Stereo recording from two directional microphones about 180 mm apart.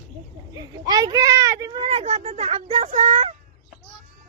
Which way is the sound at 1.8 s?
35° right (ahead or behind).